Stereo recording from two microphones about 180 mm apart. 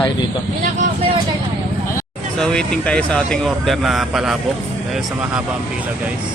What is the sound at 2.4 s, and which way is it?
Speech, 5° left (ahead or behind).